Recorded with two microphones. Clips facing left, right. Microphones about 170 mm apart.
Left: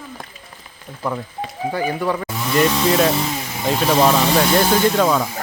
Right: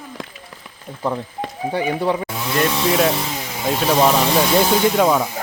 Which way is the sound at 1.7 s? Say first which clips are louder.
Right 2 dB; 25° right (ahead or behind).